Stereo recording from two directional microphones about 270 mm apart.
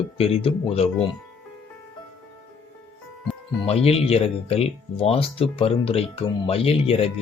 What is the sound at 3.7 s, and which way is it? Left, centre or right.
Speech, left.